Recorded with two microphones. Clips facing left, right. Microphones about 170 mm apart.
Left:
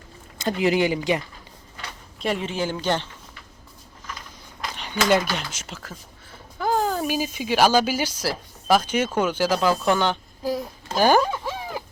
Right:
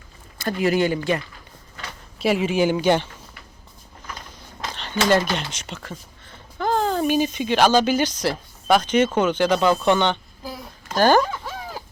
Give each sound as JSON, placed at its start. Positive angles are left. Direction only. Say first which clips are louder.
{"t": 0.3, "sound": "speech", "louder": "even", "side_deg": 20}
{"t": 2.1, "sound": "speech", "louder": "right 6 dB", "side_deg": -5}
{"t": 4.7, "sound": "a sound", "louder": "right 1 dB", "side_deg": 10}
{"t": 5.5, "sound": "speech", "louder": "right 3 dB", "side_deg": 5}